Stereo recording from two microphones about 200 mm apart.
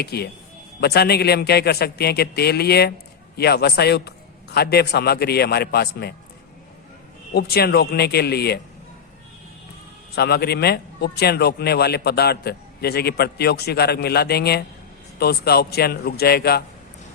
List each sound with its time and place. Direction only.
0.0 s a man's voice: 55° left (ahead or behind)
7.3 s a man's voice: 55° left (ahead or behind)
10.2 s a man's voice: 55° left (ahead or behind)